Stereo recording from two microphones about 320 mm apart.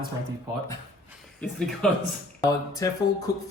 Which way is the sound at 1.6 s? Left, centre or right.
Centre.